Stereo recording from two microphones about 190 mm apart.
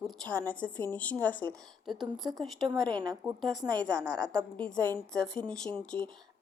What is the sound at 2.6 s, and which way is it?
A woman's voice, 20° right (ahead or behind).